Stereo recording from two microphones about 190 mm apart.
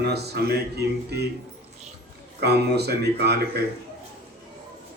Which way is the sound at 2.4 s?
60° right (ahead or behind).